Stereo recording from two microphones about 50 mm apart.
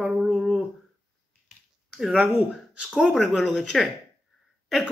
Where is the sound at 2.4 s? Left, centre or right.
Right.